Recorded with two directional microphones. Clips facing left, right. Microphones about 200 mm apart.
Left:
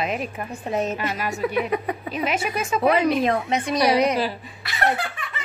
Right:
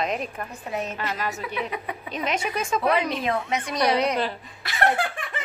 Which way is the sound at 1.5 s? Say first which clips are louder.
Left 7 dB; 45° left (ahead or behind).